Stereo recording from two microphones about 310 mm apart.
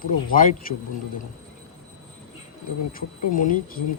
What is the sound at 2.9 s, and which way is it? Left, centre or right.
Speech, left.